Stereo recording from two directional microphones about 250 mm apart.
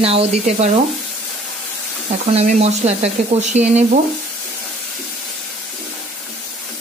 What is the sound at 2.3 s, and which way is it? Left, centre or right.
Speech, right.